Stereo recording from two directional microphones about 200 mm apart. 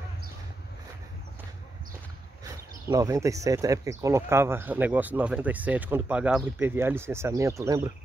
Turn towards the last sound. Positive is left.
turn(degrees=-15)  # may be behind; listen again after turning